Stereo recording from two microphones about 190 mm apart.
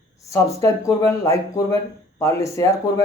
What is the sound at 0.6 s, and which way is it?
Speech, 15° left (ahead or behind).